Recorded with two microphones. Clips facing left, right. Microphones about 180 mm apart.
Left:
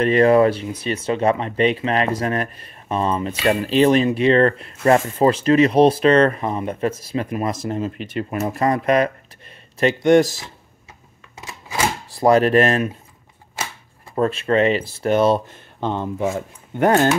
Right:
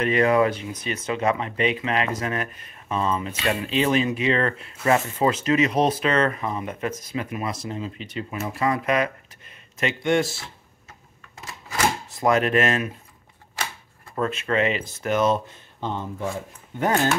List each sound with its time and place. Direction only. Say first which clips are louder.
0.0 s speech: left 6 dB; 35° left (ahead or behind); by 8.4 s 60° left (ahead or behind)
8.4 s speech: left 4 dB; 45° left (ahead or behind)
12.1 s speech: left 8 dB; 35° left (ahead or behind)
14.1 s speech: left 6 dB; 30° left (ahead or behind)
15.8 s speech: left 6 dB; 65° left (ahead or behind)